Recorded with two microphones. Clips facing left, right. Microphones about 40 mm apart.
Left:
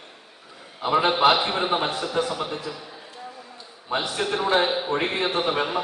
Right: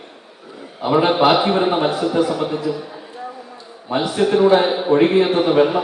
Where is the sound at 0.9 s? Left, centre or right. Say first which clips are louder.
Right 5 dB; right.